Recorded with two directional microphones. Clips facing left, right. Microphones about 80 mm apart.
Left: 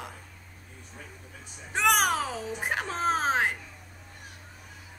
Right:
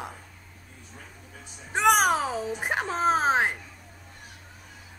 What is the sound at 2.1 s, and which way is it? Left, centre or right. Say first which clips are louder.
Speech: right 3 dB; right.